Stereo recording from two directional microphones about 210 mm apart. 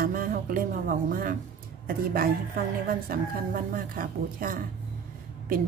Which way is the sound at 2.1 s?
45° right (ahead or behind).